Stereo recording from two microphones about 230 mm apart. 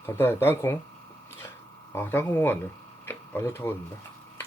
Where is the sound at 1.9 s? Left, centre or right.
Centre.